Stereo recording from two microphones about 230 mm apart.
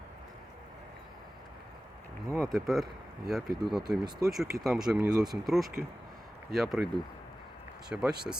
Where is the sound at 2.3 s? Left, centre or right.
Centre.